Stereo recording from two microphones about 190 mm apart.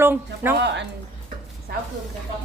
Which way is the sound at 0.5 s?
65° right (ahead or behind).